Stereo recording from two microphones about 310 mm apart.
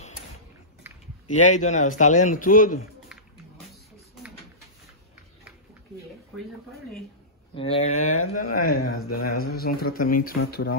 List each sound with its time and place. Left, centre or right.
1.3 s a man's voice: left
7.5 s a man's voice: centre
8.0 s speech: left
8.6 s a man's voice: left
8.9 s speech: left
9.2 s a man's voice: left